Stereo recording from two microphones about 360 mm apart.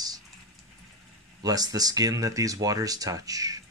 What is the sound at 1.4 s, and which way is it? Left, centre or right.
Speech, centre.